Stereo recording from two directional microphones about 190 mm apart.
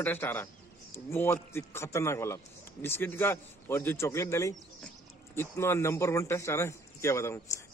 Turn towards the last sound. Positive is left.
turn(degrees=15)  # may be behind; listen again after turning